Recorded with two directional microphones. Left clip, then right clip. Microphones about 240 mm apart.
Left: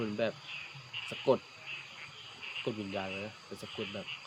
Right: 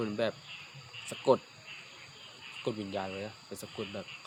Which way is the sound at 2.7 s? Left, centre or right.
Right.